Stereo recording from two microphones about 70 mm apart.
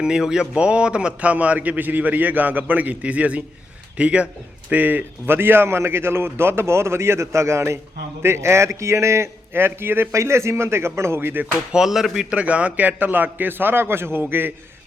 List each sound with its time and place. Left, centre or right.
0.0 s a man's voice: centre; by 10.1 s right
10.1 s a man's voice: right
11.7 s a man's voice: centre; by 14.5 s right